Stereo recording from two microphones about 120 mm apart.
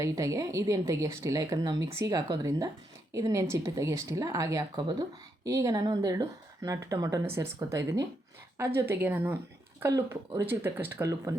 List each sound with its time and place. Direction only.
0.0 s speech: 25° right (ahead or behind)